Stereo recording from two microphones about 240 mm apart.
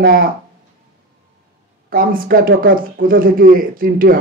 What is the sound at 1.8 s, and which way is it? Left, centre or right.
A man's voice, right.